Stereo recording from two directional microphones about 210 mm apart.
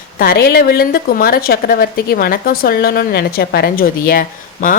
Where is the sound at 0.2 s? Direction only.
45° left (ahead or behind).